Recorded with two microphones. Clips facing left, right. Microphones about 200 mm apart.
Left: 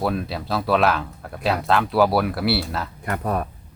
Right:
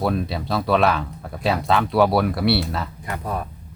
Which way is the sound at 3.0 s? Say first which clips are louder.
Left 7 dB; 55° left (ahead or behind).